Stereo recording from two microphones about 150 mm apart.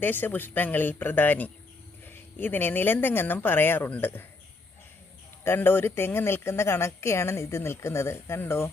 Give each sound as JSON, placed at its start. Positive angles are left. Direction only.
{"t": 0.0, "sound": "speech", "side_deg": 10}
{"t": 5.4, "sound": "speech", "side_deg": 15}